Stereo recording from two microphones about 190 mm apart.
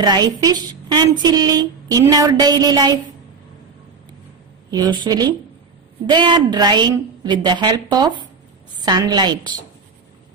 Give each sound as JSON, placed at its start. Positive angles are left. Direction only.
{"t": 0.0, "sound": "a woman's voice", "side_deg": -20}
{"t": 4.6, "sound": "a woman's voice", "side_deg": -20}